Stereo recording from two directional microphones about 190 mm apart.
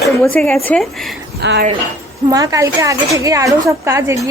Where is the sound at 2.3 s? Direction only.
15° right (ahead or behind).